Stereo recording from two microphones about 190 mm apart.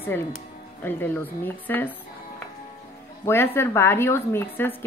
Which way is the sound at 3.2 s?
10° left (ahead or behind).